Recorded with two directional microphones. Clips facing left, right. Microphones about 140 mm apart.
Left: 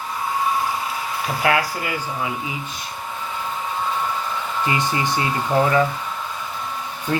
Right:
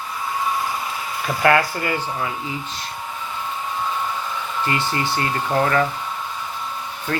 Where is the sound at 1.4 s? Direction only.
5° left (ahead or behind).